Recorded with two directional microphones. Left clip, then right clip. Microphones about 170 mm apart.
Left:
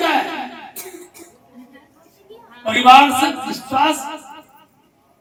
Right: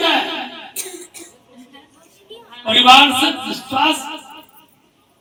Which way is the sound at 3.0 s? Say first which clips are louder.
Right 1 dB; 20° right (ahead or behind).